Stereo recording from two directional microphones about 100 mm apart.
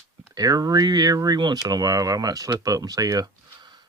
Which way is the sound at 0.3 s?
40° right (ahead or behind).